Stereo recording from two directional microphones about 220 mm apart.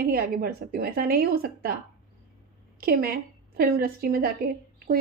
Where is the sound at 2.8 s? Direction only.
45° right (ahead or behind).